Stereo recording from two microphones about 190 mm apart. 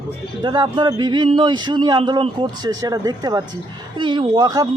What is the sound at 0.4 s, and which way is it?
A man's voice, 25° right (ahead or behind).